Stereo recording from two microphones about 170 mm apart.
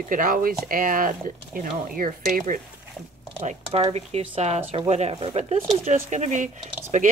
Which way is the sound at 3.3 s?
35° right (ahead or behind).